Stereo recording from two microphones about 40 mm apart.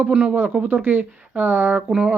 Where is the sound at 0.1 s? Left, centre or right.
Right.